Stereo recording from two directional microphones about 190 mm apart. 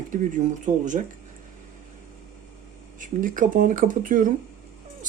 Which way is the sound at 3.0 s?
45° right (ahead or behind).